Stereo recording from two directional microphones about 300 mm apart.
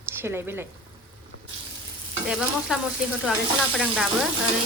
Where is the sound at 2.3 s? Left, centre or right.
Centre.